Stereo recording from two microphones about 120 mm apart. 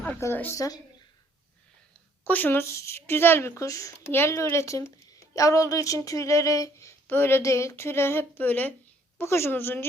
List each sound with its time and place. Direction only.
0.2 s a woman's voice: 20° left (ahead or behind)
2.2 s a woman's voice: 15° left (ahead or behind)